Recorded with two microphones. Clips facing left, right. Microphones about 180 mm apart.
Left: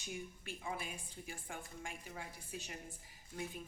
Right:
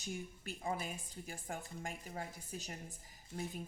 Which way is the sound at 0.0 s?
40° right (ahead or behind).